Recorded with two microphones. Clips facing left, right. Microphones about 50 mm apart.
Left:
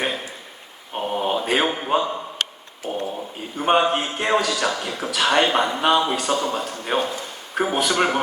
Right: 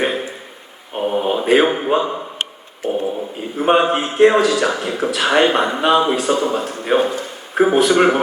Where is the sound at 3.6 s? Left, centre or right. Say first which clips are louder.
Right 4 dB; centre.